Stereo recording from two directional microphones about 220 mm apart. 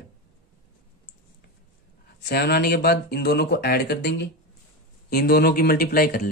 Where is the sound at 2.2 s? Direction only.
45° left (ahead or behind).